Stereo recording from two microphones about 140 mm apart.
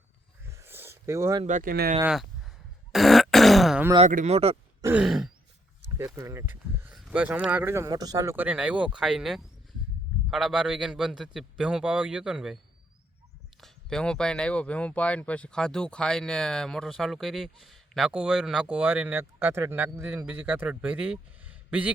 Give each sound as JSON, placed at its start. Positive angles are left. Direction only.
{"t": 0.4, "sound": "a sound", "side_deg": -20}
{"t": 1.5, "sound": "speech", "side_deg": -75}
{"t": 2.0, "sound": "a sound", "side_deg": 0}
{"t": 2.9, "sound": "grunt", "side_deg": 0}
{"t": 4.0, "sound": "speech", "side_deg": -55}
{"t": 4.8, "sound": "grunt", "side_deg": -15}
{"t": 5.0, "sound": "speech", "side_deg": -5}
{"t": 6.1, "sound": "speech", "side_deg": -20}
{"t": 13.6, "sound": "speech", "side_deg": 5}